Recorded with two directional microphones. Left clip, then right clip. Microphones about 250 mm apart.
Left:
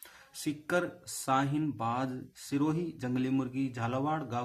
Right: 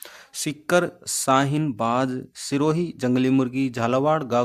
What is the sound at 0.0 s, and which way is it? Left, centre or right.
Speech, right.